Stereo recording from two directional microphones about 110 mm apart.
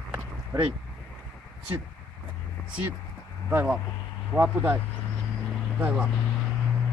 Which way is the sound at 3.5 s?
20° right (ahead or behind).